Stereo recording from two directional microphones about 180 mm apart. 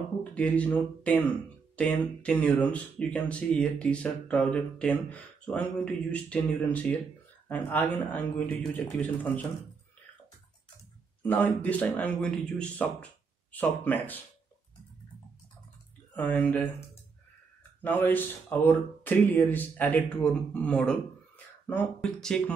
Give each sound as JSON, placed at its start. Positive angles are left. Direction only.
{"t": 0.2, "sound": "speech", "side_deg": 10}
{"t": 11.2, "sound": "speech", "side_deg": 10}
{"t": 16.2, "sound": "speech", "side_deg": 10}
{"t": 17.8, "sound": "speech", "side_deg": 10}